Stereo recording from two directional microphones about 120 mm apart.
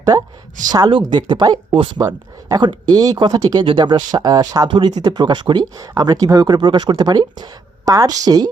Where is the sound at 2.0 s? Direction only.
30° right (ahead or behind).